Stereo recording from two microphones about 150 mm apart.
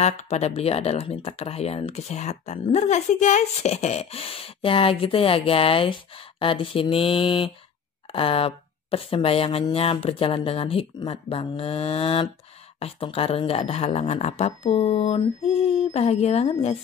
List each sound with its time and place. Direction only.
0.0 s speech: 50° left (ahead or behind)